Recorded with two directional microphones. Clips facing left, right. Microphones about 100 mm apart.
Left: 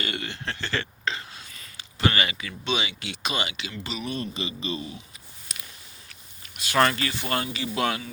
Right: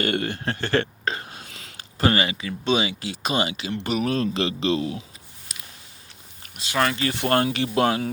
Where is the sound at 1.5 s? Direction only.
90° right.